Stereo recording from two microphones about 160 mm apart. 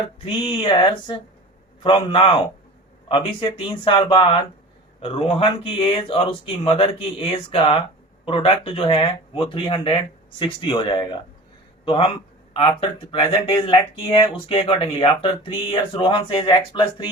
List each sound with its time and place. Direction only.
0.4 s speech: 30° left (ahead or behind)